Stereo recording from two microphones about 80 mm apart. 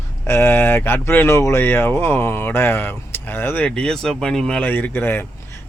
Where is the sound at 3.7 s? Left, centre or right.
Centre.